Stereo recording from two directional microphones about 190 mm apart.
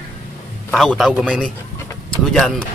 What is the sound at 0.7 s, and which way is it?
Speech, centre (ahead or behind).